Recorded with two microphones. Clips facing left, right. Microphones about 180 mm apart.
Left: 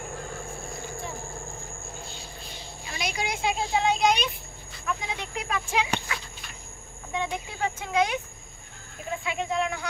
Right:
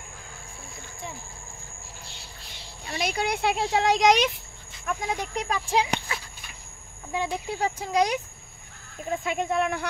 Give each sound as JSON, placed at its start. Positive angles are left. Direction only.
{"t": 3.0, "sound": "speech", "side_deg": -55}
{"t": 4.8, "sound": "speech", "side_deg": -45}
{"t": 7.1, "sound": "speech", "side_deg": -35}